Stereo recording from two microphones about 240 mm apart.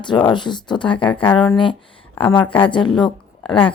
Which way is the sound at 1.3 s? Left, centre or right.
Centre.